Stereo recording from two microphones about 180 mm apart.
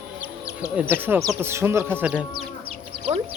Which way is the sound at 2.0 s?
5° right (ahead or behind).